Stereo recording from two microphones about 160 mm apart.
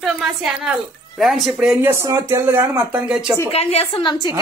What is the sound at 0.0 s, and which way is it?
Speech, 5° right (ahead or behind).